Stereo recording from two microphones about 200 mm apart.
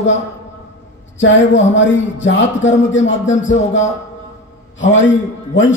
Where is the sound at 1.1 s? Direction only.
70° left (ahead or behind).